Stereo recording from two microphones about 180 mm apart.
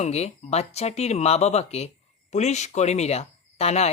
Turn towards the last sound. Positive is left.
turn(degrees=35)  # may be behind; listen again after turning